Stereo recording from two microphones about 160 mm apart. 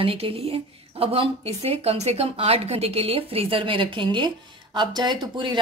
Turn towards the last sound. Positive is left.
turn(degrees=-30)  # may be behind; listen again after turning